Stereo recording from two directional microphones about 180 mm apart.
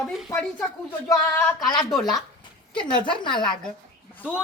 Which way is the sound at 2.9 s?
25° left (ahead or behind).